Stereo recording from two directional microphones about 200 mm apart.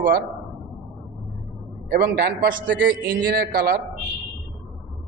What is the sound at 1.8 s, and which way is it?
A man's voice, 50° right (ahead or behind).